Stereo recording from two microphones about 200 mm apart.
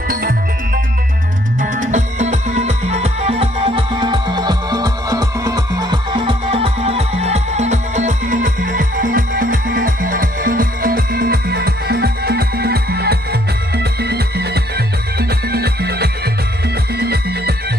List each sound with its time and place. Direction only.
0.1 s music: 45° right (ahead or behind)
1.6 s music: 40° right (ahead or behind)